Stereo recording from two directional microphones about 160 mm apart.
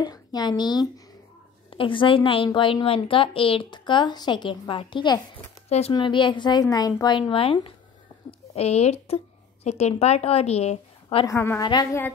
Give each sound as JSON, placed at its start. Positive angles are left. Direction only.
{"t": 0.0, "sound": "a woman's voice", "side_deg": 25}
{"t": 5.7, "sound": "a woman's voice", "side_deg": 45}
{"t": 5.9, "sound": "a woman's voice", "side_deg": 30}
{"t": 11.2, "sound": "a woman's voice", "side_deg": 15}